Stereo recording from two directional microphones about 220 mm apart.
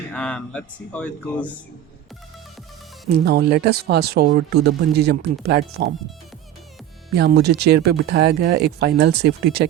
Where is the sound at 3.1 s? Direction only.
45° right (ahead or behind).